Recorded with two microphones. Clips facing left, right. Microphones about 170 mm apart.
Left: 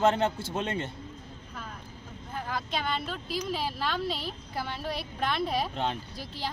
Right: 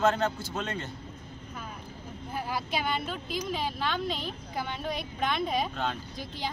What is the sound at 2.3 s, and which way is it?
Vehicle, 10° right (ahead or behind).